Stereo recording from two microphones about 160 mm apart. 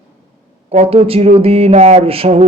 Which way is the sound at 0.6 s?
40° right (ahead or behind).